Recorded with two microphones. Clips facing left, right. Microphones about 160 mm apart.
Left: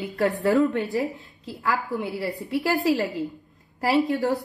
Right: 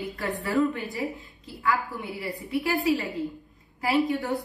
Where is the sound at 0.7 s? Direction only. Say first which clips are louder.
Left 5 dB; 75° left (ahead or behind).